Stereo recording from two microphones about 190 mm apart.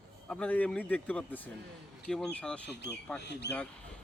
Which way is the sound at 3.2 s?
65° left (ahead or behind).